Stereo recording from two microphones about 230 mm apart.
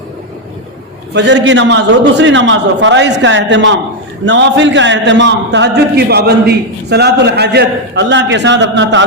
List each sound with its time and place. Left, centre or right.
1.1 s a man's voice: right